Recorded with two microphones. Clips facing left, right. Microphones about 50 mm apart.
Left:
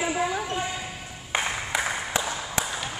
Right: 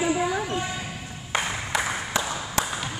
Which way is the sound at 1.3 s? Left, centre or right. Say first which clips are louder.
Right 1 dB; centre.